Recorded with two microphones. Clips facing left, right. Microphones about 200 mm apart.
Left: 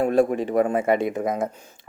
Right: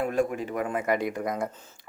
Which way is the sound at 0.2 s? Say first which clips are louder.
Left 8 dB; 35° left (ahead or behind).